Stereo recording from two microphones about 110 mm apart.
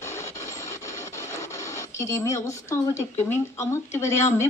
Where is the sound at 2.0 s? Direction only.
25° left (ahead or behind).